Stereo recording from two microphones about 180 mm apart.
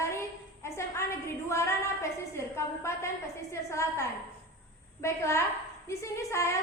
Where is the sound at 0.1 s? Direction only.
15° left (ahead or behind).